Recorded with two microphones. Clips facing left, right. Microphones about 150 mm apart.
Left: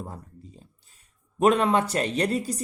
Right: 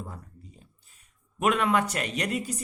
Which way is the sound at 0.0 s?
35° left (ahead or behind).